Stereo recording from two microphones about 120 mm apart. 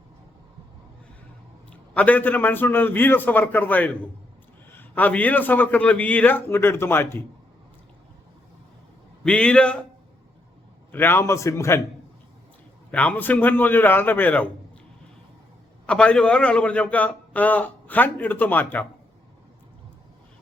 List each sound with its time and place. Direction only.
1.7 s a man's voice: 10° left (ahead or behind)
9.2 s a man's voice: 10° left (ahead or behind)
10.9 s a man's voice: 20° left (ahead or behind)
12.9 s a man's voice: 10° left (ahead or behind)
15.9 s a man's voice: 10° left (ahead or behind)